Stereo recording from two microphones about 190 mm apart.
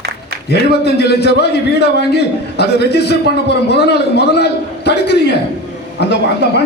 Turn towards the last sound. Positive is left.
turn(degrees=60)  # may be behind; listen again after turning